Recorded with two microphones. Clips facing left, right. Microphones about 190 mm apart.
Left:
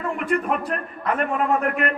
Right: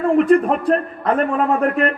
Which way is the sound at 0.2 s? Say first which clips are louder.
Right 8 dB; 35° right (ahead or behind).